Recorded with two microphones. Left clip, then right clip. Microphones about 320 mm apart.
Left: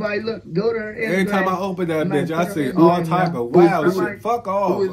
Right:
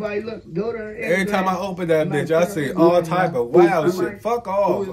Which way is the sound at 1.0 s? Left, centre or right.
Centre.